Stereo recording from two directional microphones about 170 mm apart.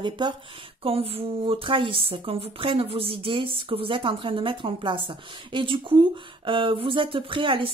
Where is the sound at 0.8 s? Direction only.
35° right (ahead or behind).